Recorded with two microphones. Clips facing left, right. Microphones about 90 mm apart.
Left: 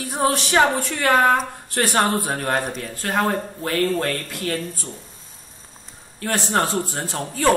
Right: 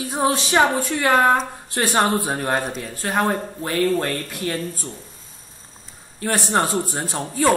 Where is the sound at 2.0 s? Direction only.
15° right (ahead or behind).